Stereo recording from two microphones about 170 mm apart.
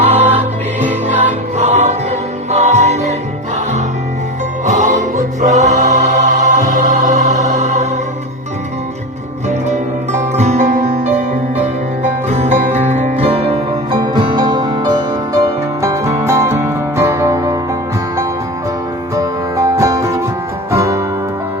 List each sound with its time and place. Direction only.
0.0 s music: 40° right (ahead or behind)
4.6 s music: 45° right (ahead or behind)
9.5 s music: 40° right (ahead or behind)
12.3 s music: 40° right (ahead or behind); by 17.6 s 20° right (ahead or behind)
19.1 s music: 20° right (ahead or behind)